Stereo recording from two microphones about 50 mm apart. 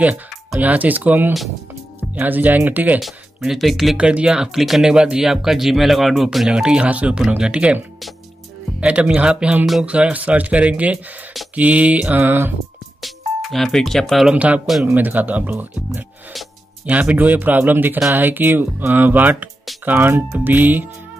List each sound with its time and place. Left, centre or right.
0.6 s speech: right
3.0 s speech: centre
3.9 s speech: centre
4.9 s speech: centre
5.2 s speech: centre
6.6 s speech: right
8.8 s speech: right
12.1 s music: right
13.0 s speech: centre
14.3 s speech: right
17.1 s speech: right